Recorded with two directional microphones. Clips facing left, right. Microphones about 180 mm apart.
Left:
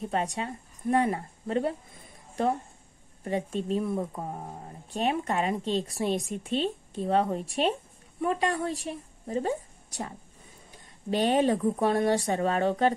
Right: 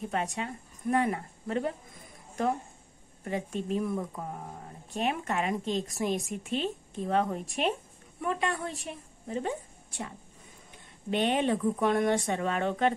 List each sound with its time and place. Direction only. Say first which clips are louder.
0.0 s a woman's voice: left 2 dB; 35° left (ahead or behind)
3.3 s a woman's voice: left 3 dB; 35° left (ahead or behind)